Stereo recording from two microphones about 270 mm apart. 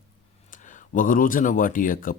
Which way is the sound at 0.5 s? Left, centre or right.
Left.